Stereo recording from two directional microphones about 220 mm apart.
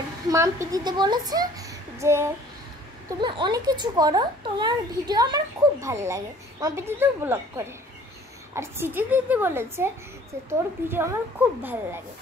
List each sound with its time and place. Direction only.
0.3 s a child's voice: 15° right (ahead or behind)